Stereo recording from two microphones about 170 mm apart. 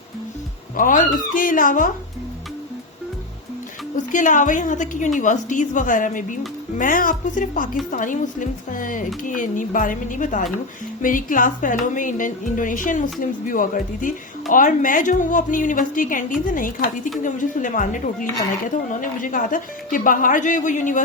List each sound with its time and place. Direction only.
0.8 s speech: 50° left (ahead or behind)
3.9 s speech: 50° left (ahead or behind)